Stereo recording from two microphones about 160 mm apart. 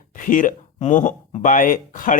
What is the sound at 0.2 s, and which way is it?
Speech, 55° left (ahead or behind).